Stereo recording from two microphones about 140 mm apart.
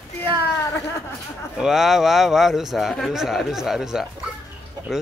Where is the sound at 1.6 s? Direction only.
5° right (ahead or behind).